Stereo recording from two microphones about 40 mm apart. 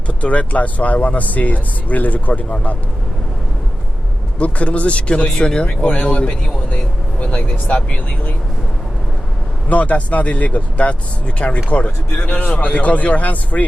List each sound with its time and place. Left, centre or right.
0.1 s speech: left
4.4 s speech: left
5.8 s speech: left
6.1 s speech: left
9.6 s speech: left
12.1 s speech: left